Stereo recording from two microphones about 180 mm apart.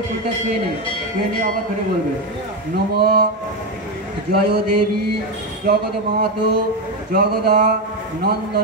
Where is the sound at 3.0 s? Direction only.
60° right (ahead or behind).